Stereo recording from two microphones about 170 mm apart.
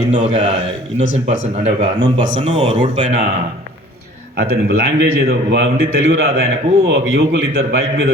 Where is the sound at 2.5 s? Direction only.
45° right (ahead or behind).